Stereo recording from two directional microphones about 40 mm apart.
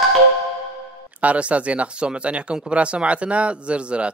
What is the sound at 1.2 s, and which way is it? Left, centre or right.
Speech, right.